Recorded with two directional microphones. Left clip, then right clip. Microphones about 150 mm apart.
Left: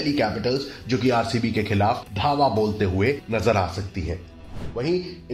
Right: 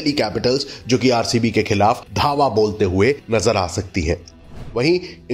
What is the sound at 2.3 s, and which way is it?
Music, 25° right (ahead or behind).